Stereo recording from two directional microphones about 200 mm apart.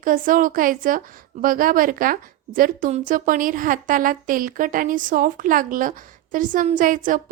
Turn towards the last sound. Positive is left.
turn(degrees=-40)  # may be behind; listen again after turning